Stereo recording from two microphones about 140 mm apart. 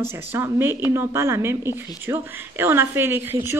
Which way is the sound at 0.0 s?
15° right (ahead or behind).